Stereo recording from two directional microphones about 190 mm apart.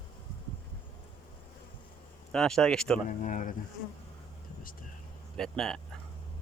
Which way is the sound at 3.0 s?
40° left (ahead or behind).